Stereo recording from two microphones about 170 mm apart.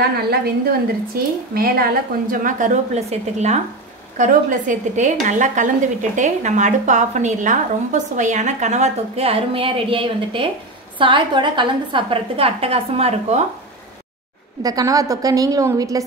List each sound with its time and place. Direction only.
0.3 s a woman's voice: 65° right (ahead or behind); by 13.4 s 35° right (ahead or behind)
14.6 s a woman's voice: 20° right (ahead or behind)